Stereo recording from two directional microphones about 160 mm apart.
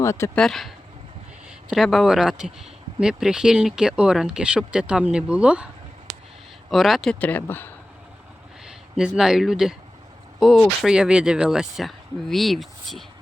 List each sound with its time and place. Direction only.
0.0 s speech: 15° left (ahead or behind)
0.3 s speech: 5° left (ahead or behind)
1.7 s speech: centre (ahead or behind)
6.7 s speech: centre (ahead or behind)
8.6 s speech: 5° right (ahead or behind)